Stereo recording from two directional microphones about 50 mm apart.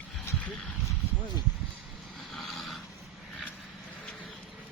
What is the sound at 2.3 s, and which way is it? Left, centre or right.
Snoring, centre.